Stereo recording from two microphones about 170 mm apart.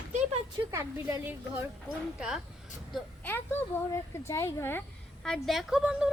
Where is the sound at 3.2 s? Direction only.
10° left (ahead or behind).